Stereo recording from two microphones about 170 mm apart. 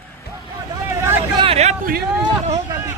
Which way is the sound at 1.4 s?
40° right (ahead or behind).